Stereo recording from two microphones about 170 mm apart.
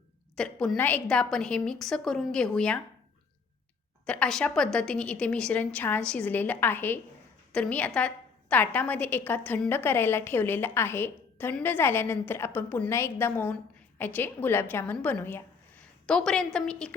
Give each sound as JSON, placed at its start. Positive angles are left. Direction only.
{"t": 0.3, "sound": "a woman's voice", "side_deg": 5}
{"t": 4.0, "sound": "a woman's voice", "side_deg": 5}